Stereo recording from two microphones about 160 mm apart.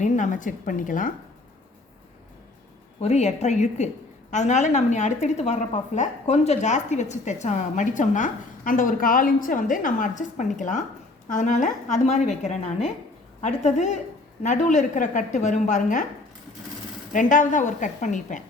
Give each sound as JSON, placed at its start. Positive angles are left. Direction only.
{"t": 0.0, "sound": "a woman's voice", "side_deg": 50}
{"t": 3.0, "sound": "a woman's voice", "side_deg": 45}
{"t": 17.1, "sound": "a woman's voice", "side_deg": 55}